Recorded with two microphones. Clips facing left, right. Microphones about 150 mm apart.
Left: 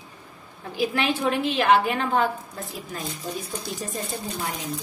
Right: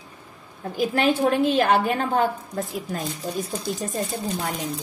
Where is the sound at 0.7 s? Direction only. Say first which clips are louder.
Right 3 dB; 45° right (ahead or behind).